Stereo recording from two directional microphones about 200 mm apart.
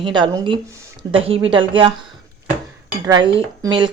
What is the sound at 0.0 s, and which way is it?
A woman's voice, 25° right (ahead or behind).